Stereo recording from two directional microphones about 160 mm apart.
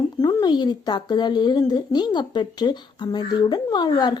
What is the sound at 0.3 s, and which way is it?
Speech, 20° left (ahead or behind).